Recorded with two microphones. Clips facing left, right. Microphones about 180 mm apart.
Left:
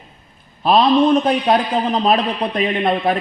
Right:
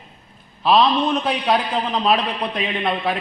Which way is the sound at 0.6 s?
45° left (ahead or behind).